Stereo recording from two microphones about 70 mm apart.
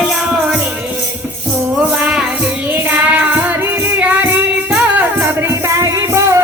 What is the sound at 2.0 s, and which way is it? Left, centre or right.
Music, centre.